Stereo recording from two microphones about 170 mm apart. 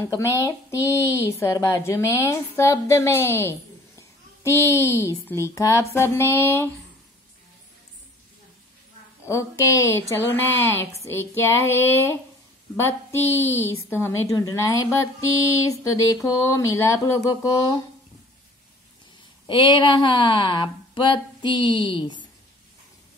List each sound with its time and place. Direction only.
0.0 s speech: 20° left (ahead or behind)
9.2 s speech: 15° left (ahead or behind)
19.4 s speech: 25° left (ahead or behind)